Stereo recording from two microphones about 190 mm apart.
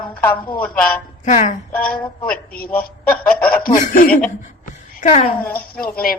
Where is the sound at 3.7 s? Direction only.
45° left (ahead or behind).